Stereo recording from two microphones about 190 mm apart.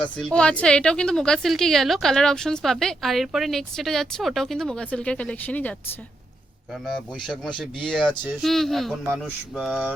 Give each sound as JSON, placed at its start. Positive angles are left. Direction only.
{"t": 0.0, "sound": "a woman's voice", "side_deg": 5}
{"t": 6.8, "sound": "a woman's voice", "side_deg": 5}